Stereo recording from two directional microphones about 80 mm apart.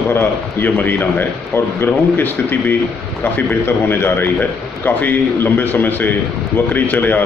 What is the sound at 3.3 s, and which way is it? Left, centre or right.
A man's voice, left.